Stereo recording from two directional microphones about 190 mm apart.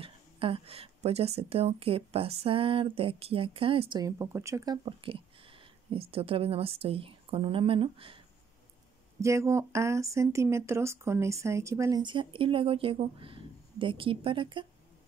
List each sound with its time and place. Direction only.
0.0 s a woman's voice: 30° right (ahead or behind)
9.2 s speech: 15° right (ahead or behind)